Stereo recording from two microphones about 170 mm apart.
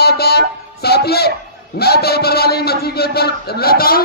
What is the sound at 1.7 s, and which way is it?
A man's voice, 70° left (ahead or behind).